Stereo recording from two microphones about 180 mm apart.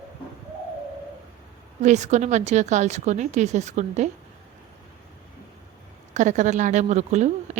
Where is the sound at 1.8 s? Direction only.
40° right (ahead or behind).